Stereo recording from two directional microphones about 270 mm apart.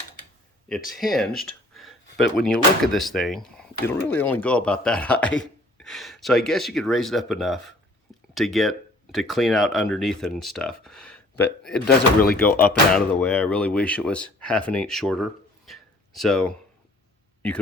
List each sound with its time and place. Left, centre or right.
0.9 s speech: centre
11.9 s speech: left
12.4 s speech: centre